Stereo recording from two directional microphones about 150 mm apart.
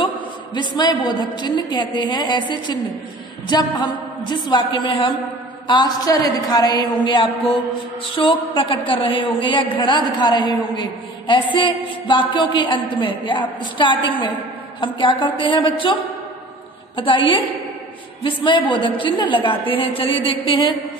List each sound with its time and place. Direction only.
0.6 s a woman's voice: 30° left (ahead or behind)